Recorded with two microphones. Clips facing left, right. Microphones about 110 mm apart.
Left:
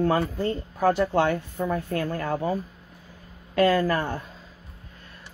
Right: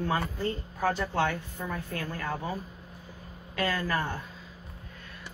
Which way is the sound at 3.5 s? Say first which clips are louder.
Left 9 dB; 50° left (ahead or behind).